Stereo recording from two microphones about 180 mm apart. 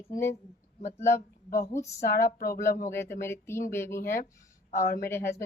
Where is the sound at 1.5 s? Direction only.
55° left (ahead or behind).